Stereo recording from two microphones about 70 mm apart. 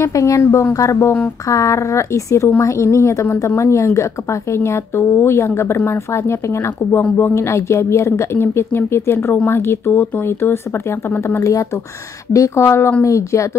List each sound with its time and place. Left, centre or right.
0.0 s a woman's voice: left
12.3 s a woman's voice: left